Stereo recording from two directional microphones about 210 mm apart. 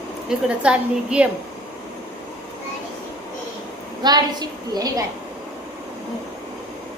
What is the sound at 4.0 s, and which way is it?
A woman's voice, 20° right (ahead or behind).